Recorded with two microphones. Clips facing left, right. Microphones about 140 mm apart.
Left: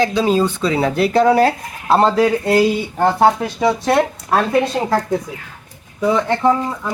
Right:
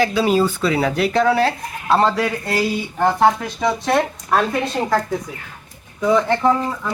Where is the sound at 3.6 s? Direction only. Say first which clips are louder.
Left 3 dB; 5° left (ahead or behind).